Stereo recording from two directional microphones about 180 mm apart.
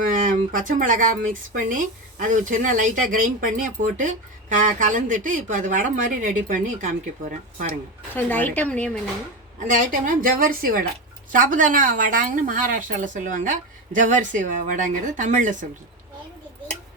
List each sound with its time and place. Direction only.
0.1 s speech: 50° right (ahead or behind)
7.7 s speech: 10° left (ahead or behind)
9.7 s speech: 50° right (ahead or behind)